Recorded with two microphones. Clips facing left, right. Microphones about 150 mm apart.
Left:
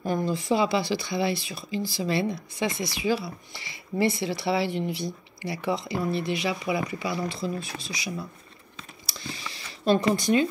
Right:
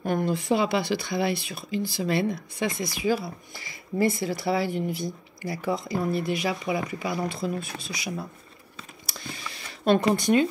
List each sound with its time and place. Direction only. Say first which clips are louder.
0.0 s speech: right 1 dB; 55° right (ahead or behind)
9.1 s a sound: left 1 dB; 55° right (ahead or behind)
10.1 s speech: right 1 dB; 55° right (ahead or behind)